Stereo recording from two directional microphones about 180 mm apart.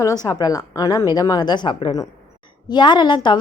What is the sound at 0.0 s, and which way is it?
A woman's voice, 20° left (ahead or behind).